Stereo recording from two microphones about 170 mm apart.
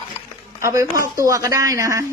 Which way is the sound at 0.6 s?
20° right (ahead or behind).